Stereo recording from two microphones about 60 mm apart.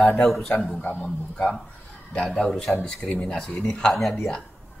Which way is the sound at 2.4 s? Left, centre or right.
Centre.